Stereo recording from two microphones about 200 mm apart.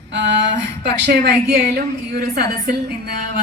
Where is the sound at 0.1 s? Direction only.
60° right (ahead or behind).